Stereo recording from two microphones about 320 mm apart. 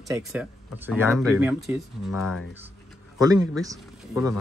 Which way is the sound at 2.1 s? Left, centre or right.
Left.